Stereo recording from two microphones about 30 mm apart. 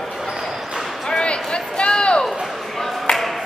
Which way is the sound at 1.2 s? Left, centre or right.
Left.